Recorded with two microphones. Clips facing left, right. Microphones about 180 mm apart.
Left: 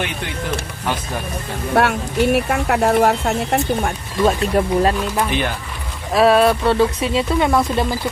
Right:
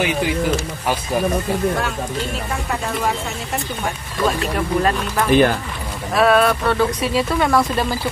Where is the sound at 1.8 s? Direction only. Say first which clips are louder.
Left 7 dB; 70° left (ahead or behind).